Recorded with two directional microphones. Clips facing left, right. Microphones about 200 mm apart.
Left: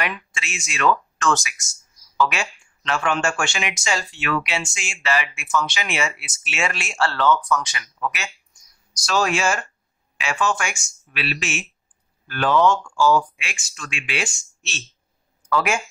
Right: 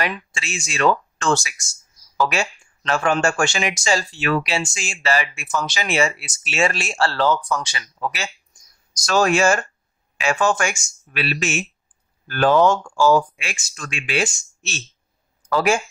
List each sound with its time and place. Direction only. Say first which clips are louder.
0.0 s speech: right 3 dB; 35° right (ahead or behind)
8.9 s speech: right 4 dB; 45° right (ahead or behind)